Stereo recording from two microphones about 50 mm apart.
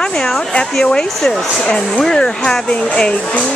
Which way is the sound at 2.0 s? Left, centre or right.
Centre.